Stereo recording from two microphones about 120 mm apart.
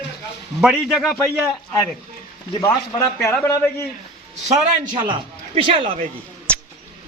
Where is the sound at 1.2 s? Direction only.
20° left (ahead or behind).